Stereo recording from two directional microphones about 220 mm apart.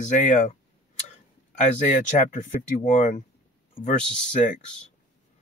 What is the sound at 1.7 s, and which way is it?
Speech, 5° left (ahead or behind).